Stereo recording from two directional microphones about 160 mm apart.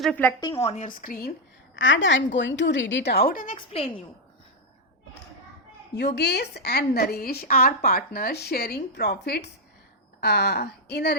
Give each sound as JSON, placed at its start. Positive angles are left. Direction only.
{"t": 0.0, "sound": "a woman's voice", "side_deg": 10}
{"t": 0.3, "sound": "a woman's voice", "side_deg": 25}
{"t": 0.6, "sound": "a woman's voice", "side_deg": 40}
{"t": 0.9, "sound": "speech", "side_deg": 60}
{"t": 2.3, "sound": "a woman's voice", "side_deg": 90}
{"t": 6.0, "sound": "a woman's voice", "side_deg": 90}